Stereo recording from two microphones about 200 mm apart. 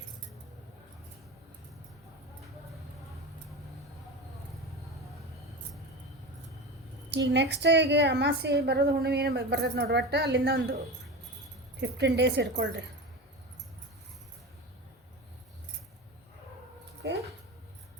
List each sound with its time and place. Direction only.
7.1 s a woman's voice: 60° right (ahead or behind)
11.8 s a woman's voice: 60° right (ahead or behind)
17.0 s a sound: 60° right (ahead or behind)